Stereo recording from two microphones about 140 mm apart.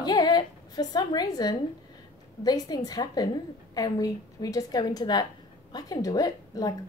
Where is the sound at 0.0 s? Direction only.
30° left (ahead or behind).